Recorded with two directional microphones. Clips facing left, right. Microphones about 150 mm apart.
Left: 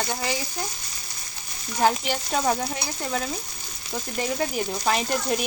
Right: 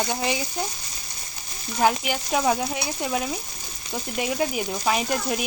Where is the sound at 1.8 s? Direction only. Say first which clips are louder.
Even; 5° right (ahead or behind).